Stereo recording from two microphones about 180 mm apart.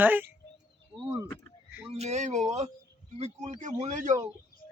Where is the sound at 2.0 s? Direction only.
40° right (ahead or behind).